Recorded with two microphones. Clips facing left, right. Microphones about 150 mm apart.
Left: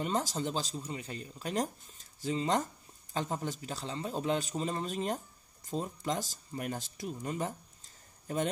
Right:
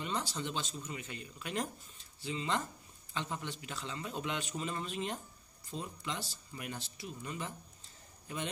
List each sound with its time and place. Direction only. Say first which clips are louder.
0.0 s speech: left 5 dB; 45° left (ahead or behind)